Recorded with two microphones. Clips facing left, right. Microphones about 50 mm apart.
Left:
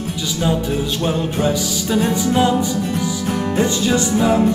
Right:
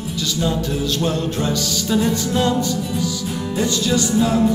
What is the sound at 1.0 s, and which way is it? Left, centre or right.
Music, centre.